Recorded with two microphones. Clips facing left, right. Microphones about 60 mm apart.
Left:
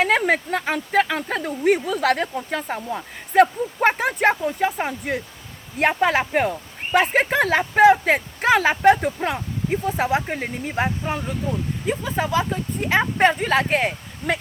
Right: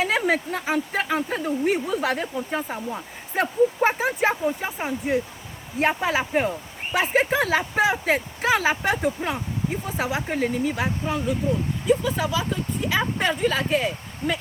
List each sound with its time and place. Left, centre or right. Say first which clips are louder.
0.0 s speech: left 3 dB; left
10.0 s speech: left 2 dB; left